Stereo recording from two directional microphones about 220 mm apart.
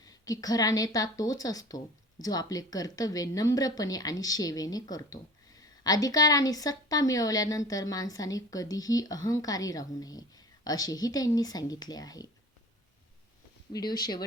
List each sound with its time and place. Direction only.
0.0 s a woman's voice: 15° left (ahead or behind)
14.0 s a woman's voice: 20° left (ahead or behind)